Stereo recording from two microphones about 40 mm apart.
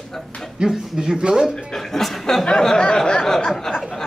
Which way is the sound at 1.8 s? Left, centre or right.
Centre.